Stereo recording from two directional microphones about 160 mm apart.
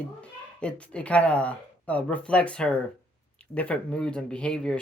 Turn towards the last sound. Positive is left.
turn(degrees=5)  # may be behind; listen again after turning